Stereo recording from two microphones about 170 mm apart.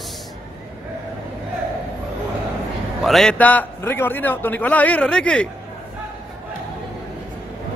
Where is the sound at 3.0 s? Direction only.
Centre (ahead or behind).